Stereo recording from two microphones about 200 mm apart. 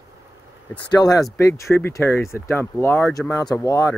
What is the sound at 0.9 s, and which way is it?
Speech, 15° left (ahead or behind).